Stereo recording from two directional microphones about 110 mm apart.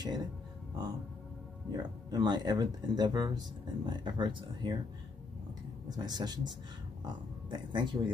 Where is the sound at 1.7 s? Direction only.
40° right (ahead or behind).